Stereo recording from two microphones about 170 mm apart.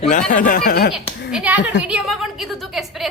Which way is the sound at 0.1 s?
55° left (ahead or behind).